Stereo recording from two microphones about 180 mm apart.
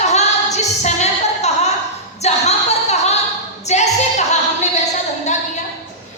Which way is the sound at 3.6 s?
40° left (ahead or behind).